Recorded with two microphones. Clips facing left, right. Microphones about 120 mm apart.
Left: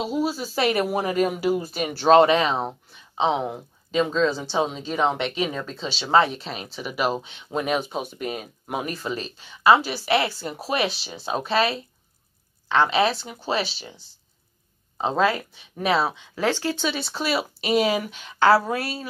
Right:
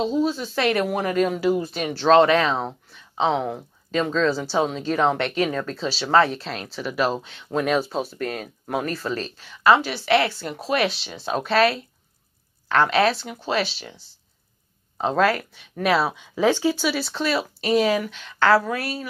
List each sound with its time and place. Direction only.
0.0 s speech: 10° left (ahead or behind)
3.2 s speech: centre (ahead or behind)
5.8 s speech: 5° right (ahead or behind)
6.0 s speech: 15° left (ahead or behind)
15.8 s speech: centre (ahead or behind)
16.3 s speech: 15° right (ahead or behind); by 17.5 s 5° left (ahead or behind)
17.6 s speech: 20° left (ahead or behind)
18.1 s speech: 10° left (ahead or behind)
18.7 s a woman's voice: 30° left (ahead or behind)